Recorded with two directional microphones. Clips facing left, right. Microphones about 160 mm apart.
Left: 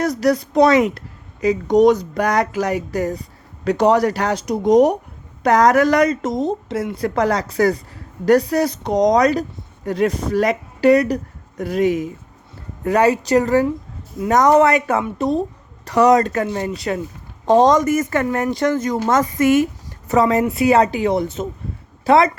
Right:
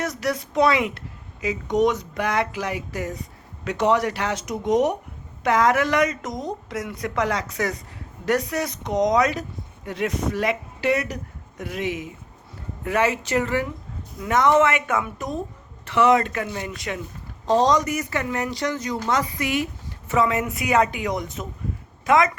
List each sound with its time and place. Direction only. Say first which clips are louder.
0.0 s speech: left 8 dB; 35° left (ahead or behind)
17.4 s speech: left 6 dB; 50° left (ahead or behind); by 22.3 s 30° left (ahead or behind)